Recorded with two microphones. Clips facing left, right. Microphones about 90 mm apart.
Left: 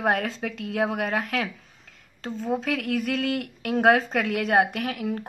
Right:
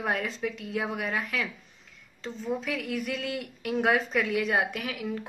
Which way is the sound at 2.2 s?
45° left (ahead or behind).